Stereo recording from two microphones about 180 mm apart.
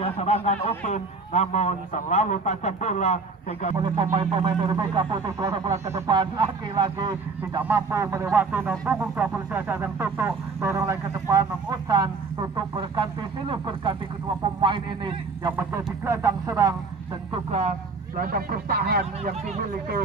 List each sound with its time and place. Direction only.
0.0 s a man's voice: 35° left (ahead or behind)
3.7 s speech: 25° right (ahead or behind)
15.5 s speech: 15° right (ahead or behind)
17.3 s speech: 40° right (ahead or behind)
18.2 s speech: 55° right (ahead or behind)